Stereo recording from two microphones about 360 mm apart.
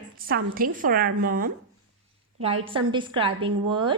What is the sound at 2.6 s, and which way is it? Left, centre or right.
A woman's voice, centre.